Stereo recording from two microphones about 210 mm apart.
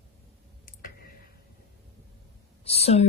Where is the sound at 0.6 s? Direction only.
40° left (ahead or behind).